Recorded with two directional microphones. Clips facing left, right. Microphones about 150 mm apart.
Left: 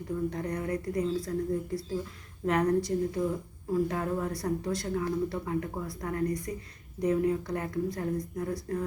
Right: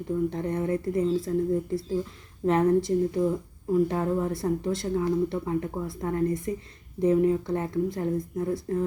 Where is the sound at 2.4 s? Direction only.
25° right (ahead or behind).